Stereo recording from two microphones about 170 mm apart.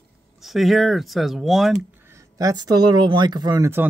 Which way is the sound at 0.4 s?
Centre (ahead or behind).